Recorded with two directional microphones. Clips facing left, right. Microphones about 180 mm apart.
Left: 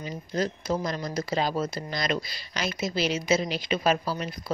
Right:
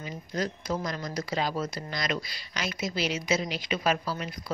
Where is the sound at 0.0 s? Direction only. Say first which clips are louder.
Left 3 dB; 25° left (ahead or behind).